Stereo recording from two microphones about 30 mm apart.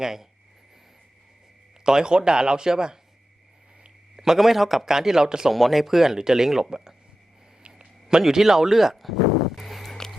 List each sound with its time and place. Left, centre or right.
0.0 s speech: centre
1.8 s speech: right
4.2 s speech: centre
5.5 s speech: centre
6.7 s speech: right
8.2 s a sound: centre